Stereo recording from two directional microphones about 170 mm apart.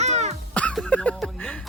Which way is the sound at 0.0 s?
40° right (ahead or behind).